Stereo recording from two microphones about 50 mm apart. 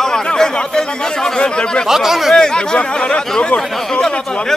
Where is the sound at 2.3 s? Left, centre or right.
Centre.